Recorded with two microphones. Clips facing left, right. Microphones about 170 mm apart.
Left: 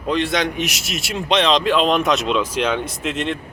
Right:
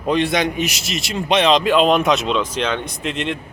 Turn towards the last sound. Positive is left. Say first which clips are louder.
# even
turn(degrees=0)  # may be behind; listen again after turning